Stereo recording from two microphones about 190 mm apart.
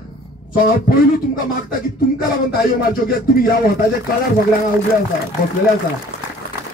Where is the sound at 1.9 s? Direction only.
50° left (ahead or behind).